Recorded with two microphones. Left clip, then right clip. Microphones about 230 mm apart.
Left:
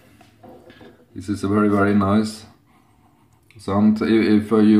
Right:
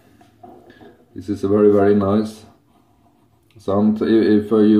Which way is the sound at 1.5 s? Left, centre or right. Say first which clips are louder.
Right 5 dB; left.